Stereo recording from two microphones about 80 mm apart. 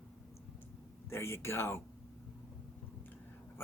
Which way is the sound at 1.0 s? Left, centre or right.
Left.